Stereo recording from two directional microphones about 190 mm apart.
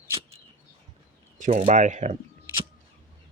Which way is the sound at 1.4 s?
40° right (ahead or behind).